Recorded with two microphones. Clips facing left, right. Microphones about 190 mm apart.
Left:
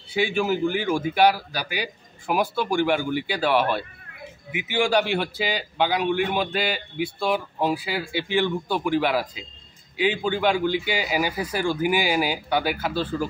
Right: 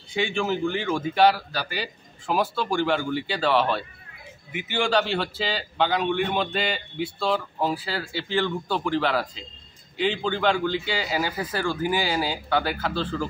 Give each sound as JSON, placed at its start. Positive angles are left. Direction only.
{"t": 0.1, "sound": "a man's voice", "side_deg": 10}